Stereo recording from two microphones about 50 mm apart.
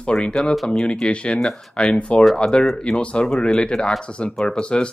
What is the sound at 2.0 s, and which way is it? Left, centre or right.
Speech, left.